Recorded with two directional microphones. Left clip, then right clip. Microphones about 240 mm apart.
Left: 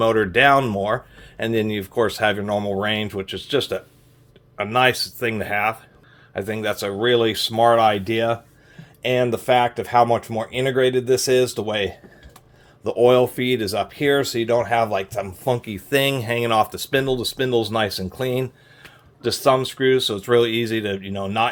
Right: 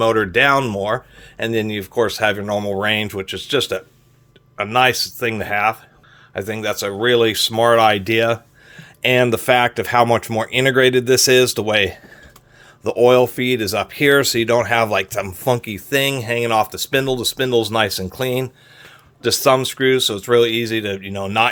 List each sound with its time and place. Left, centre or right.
0.0 s speech: centre; by 11.9 s right
12.8 s speech: right